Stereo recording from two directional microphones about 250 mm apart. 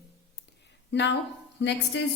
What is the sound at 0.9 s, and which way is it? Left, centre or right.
A woman's voice, left.